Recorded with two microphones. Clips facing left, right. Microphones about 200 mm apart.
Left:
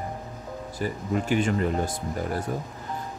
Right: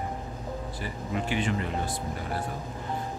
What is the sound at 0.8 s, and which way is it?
Speech, 45° left (ahead or behind).